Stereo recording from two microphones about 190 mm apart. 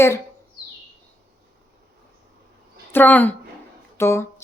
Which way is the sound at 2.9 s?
10° left (ahead or behind).